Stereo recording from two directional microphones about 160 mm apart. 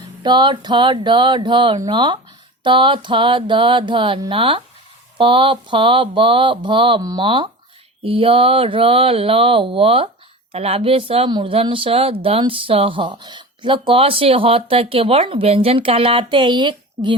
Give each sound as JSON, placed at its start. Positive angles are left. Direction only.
{"t": 0.2, "sound": "speech", "side_deg": -30}